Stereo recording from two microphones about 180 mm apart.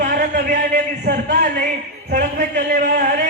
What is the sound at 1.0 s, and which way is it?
Speech, 65° right (ahead or behind).